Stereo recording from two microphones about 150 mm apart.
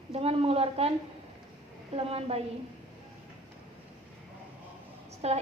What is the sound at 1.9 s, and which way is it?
Speech, 40° right (ahead or behind).